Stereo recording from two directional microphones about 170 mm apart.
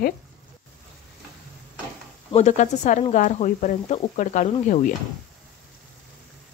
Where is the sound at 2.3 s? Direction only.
45° left (ahead or behind).